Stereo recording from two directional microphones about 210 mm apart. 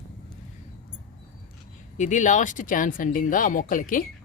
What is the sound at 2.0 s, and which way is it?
A man's voice, 35° left (ahead or behind).